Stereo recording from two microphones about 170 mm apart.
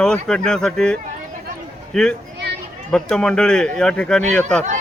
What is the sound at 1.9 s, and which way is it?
Speech, centre (ahead or behind).